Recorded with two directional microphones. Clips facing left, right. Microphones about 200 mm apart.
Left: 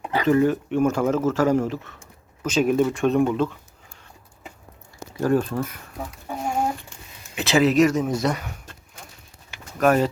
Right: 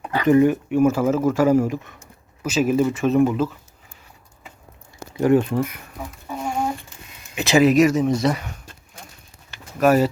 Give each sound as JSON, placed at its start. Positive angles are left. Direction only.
{"t": 0.0, "sound": "a sound", "side_deg": 15}
{"t": 0.3, "sound": "speech", "side_deg": -15}
{"t": 5.1, "sound": "speech", "side_deg": -15}
{"t": 7.3, "sound": "speech", "side_deg": -15}
{"t": 9.7, "sound": "speech", "side_deg": -5}